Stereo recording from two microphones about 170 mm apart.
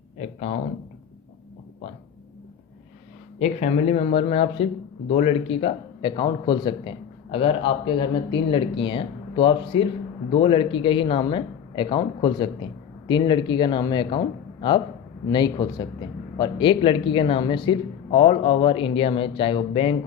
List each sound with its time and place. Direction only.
0.2 s speech: 40° left (ahead or behind)
3.3 s a man's voice: 40° left (ahead or behind)
15.3 s a man's voice: 25° left (ahead or behind)